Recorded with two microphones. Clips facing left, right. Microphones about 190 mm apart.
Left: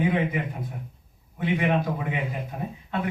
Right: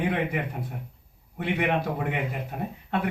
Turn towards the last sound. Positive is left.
turn(degrees=-70)  # may be behind; listen again after turning